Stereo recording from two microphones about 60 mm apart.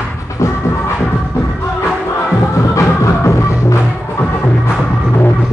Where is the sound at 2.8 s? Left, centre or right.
Left.